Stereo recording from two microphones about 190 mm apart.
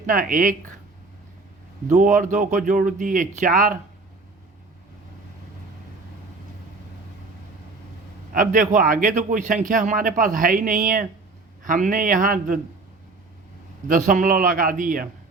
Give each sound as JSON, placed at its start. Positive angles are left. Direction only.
{"t": 0.0, "sound": "a man's voice", "side_deg": -45}
{"t": 1.9, "sound": "speech", "side_deg": -40}
{"t": 8.3, "sound": "a man's voice", "side_deg": -45}
{"t": 13.8, "sound": "a man's voice", "side_deg": -45}